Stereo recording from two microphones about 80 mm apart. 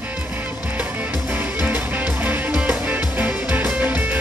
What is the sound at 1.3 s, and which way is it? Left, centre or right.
Music, centre.